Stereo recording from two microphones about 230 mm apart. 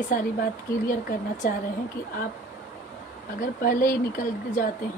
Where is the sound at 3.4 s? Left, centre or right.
Left.